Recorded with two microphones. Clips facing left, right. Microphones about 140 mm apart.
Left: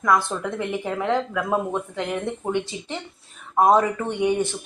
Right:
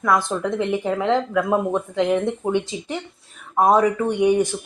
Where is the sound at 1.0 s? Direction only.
15° right (ahead or behind).